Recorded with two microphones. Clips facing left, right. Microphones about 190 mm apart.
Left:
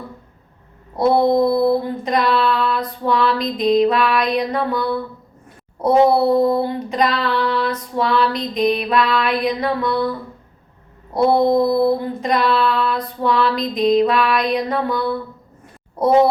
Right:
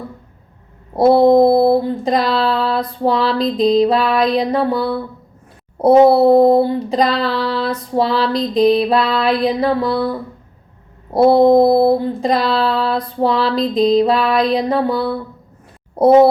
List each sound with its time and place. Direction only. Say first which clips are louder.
1.4 s child singing: right 5 dB; 30° right (ahead or behind)
11.1 s child singing: right 5 dB; 30° right (ahead or behind)